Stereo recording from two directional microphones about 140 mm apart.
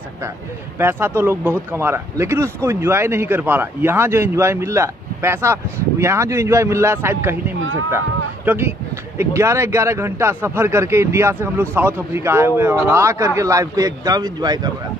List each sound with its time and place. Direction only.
0.7 s speech: 15° right (ahead or behind)
8.5 s speech: 15° right (ahead or behind)